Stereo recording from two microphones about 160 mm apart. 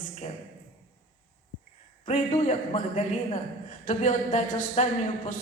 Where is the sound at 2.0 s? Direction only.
50° left (ahead or behind).